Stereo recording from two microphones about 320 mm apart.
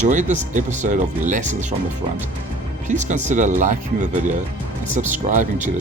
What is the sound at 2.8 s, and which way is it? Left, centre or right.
Speech, right.